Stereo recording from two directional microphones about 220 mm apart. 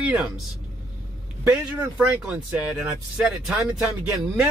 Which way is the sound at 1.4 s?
10° right (ahead or behind).